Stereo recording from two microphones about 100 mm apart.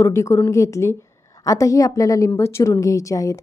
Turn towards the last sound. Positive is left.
turn(degrees=30)  # may be behind; listen again after turning